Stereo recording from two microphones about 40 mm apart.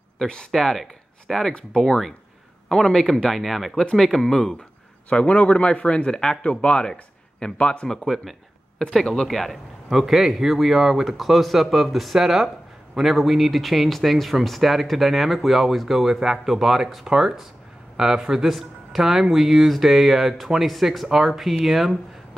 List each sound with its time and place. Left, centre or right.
0.5 s speech: centre
1.8 s speech: centre
3.3 s speech: centre
3.7 s speech: centre
5.2 s speech: left
6.9 s a sound: centre
7.5 s speech: left
9.0 s speech: centre
9.3 s speech: centre